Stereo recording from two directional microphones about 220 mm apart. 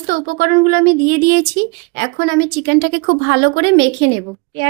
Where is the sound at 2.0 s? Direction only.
55° right (ahead or behind).